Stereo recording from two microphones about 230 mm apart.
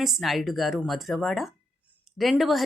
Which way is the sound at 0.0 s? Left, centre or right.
Centre.